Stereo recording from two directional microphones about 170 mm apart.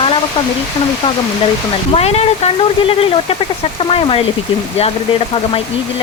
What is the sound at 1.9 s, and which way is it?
Speech, 35° left (ahead or behind).